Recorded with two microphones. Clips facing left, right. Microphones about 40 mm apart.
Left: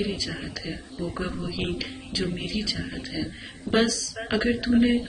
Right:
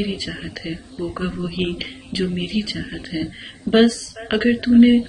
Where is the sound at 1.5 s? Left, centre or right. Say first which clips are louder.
Right 5 dB; right.